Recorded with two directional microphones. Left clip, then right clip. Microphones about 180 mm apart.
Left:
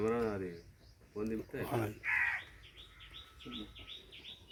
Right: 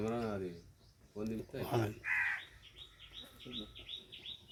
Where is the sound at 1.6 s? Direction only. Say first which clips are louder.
Right 2 dB; 10° right (ahead or behind).